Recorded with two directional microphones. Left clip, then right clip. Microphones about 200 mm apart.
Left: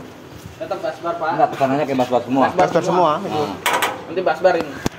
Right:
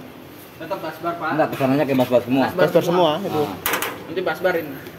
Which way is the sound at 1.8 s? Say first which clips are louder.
Even; 55° right (ahead or behind).